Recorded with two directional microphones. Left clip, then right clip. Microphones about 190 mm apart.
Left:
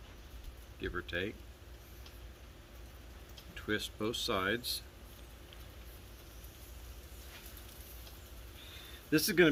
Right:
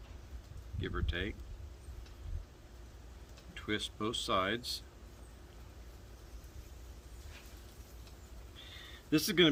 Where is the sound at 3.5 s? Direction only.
10° right (ahead or behind).